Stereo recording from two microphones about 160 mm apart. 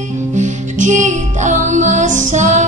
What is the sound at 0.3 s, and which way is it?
Music, 50° right (ahead or behind).